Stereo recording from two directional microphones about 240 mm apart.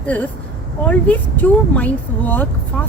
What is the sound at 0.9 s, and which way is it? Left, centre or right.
Speech, centre.